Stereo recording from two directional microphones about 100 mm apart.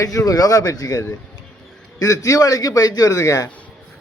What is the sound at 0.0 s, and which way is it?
A man's voice, 35° left (ahead or behind).